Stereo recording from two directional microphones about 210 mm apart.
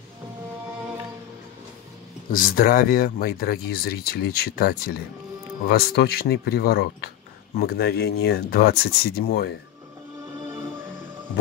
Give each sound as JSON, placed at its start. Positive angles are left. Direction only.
{"t": 2.3, "sound": "speech", "side_deg": 45}
{"t": 10.4, "sound": "music", "side_deg": -20}